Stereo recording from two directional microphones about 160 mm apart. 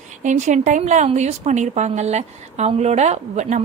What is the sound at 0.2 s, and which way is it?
A woman's voice, 50° right (ahead or behind).